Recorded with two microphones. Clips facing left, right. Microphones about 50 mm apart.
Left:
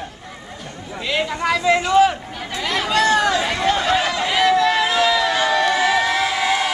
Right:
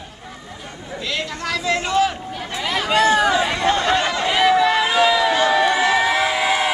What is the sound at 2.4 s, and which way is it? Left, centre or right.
Chatter, centre.